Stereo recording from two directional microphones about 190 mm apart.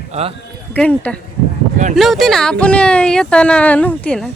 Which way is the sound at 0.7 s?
5° left (ahead or behind).